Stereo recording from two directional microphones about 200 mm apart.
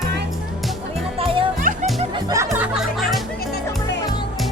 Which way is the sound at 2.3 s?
15° right (ahead or behind).